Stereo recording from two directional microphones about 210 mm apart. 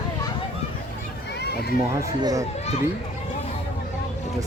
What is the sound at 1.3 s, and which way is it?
Children playing, 50° left (ahead or behind).